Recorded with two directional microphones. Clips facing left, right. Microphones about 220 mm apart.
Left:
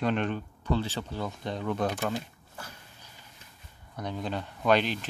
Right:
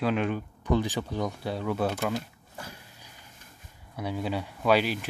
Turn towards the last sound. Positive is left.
turn(degrees=-5)  # may be behind; listen again after turning